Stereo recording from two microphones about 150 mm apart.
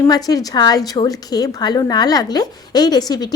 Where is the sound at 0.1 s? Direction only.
25° left (ahead or behind).